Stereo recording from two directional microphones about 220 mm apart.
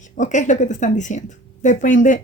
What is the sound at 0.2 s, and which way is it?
Speech, 35° left (ahead or behind).